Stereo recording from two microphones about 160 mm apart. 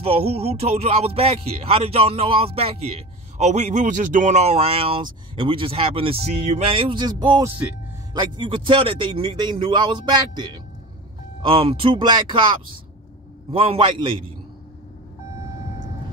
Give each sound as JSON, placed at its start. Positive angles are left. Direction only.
{"t": 0.0, "sound": "a man's voice", "side_deg": -40}
{"t": 13.5, "sound": "speech", "side_deg": -35}